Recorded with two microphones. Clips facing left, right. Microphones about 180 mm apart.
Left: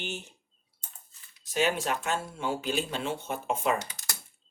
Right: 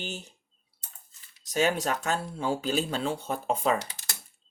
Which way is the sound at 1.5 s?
40° right (ahead or behind).